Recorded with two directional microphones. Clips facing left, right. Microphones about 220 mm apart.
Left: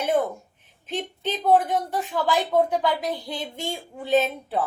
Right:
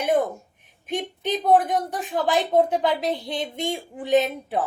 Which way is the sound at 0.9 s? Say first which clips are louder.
Right 3 dB; 15° right (ahead or behind).